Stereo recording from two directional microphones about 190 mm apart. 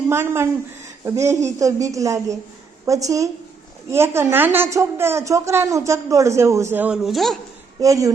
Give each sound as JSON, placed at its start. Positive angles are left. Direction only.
{"t": 0.1, "sound": "speech", "side_deg": -15}
{"t": 7.8, "sound": "speech", "side_deg": -15}